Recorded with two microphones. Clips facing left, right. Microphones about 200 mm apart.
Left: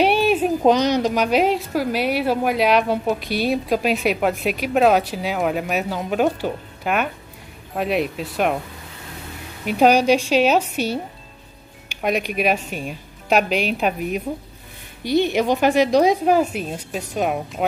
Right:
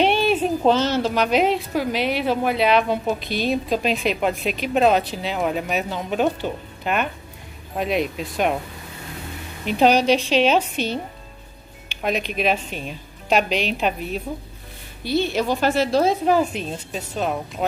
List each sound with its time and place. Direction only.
0.0 s a woman's voice: 10° left (ahead or behind)
9.7 s a woman's voice: 10° left (ahead or behind)
12.0 s a woman's voice: 10° left (ahead or behind)